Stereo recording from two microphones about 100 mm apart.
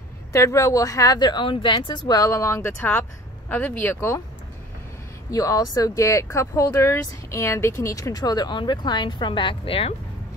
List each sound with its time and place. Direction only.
0.3 s speech: 30° left (ahead or behind); by 2.1 s 50° left (ahead or behind)
2.1 s speech: 35° left (ahead or behind)
5.3 s speech: 35° left (ahead or behind); by 9.9 s 70° left (ahead or behind)